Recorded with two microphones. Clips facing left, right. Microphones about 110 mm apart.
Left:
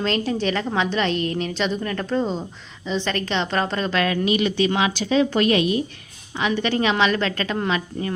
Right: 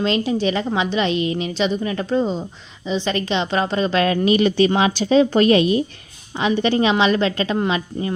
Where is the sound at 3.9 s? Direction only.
30° right (ahead or behind).